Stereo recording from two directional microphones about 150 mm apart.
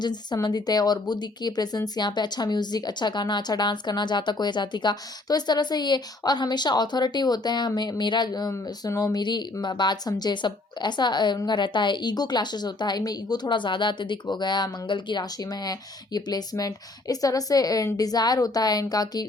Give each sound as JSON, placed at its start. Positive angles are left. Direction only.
{"t": 0.0, "sound": "speech", "side_deg": 30}